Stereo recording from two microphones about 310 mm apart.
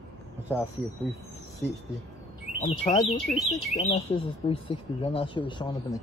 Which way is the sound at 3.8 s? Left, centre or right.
Centre.